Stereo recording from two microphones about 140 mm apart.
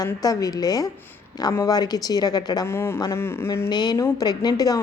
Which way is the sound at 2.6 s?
20° left (ahead or behind).